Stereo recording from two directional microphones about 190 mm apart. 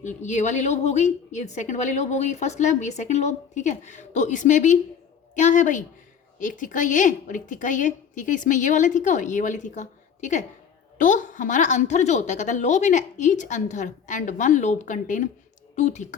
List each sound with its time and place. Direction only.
0.0 s a woman's voice: 40° left (ahead or behind)